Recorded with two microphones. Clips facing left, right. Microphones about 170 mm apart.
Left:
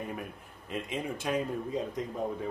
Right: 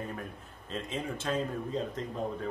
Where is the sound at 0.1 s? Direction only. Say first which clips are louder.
Left 1 dB; 15° left (ahead or behind).